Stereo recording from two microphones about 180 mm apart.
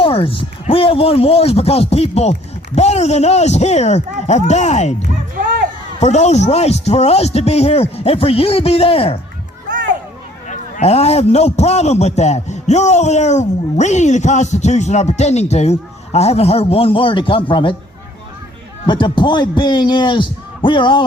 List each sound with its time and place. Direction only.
0.0 s a man's voice: 30° left (ahead or behind)
6.0 s a man's voice: 40° left (ahead or behind)
10.5 s a man's voice: 35° left (ahead or behind)
18.9 s a man's voice: 25° left (ahead or behind)